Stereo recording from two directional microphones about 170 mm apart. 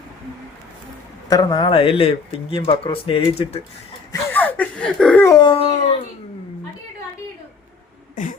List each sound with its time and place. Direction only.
1.3 s speech: 20° left (ahead or behind)
4.1 s speech: 10° left (ahead or behind)
5.3 s speech: 30° left (ahead or behind)
8.1 s speech: 50° left (ahead or behind)